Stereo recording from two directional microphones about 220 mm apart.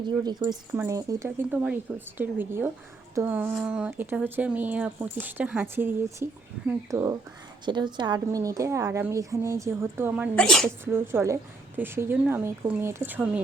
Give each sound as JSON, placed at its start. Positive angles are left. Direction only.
{"t": 0.3, "sound": "a woman's voice", "side_deg": -20}
{"t": 10.3, "sound": "a woman's voice", "side_deg": 5}
{"t": 10.9, "sound": "a woman's voice", "side_deg": -10}